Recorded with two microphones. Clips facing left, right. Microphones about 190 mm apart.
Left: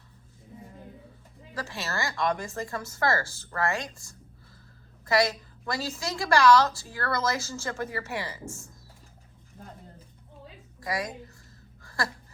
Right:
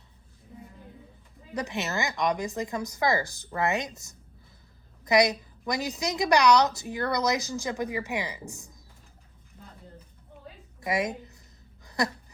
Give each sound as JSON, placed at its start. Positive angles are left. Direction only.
{"t": 1.5, "sound": "a woman's voice", "side_deg": -20}
{"t": 10.8, "sound": "a woman's voice", "side_deg": -20}
{"t": 11.8, "sound": "a sound", "side_deg": -20}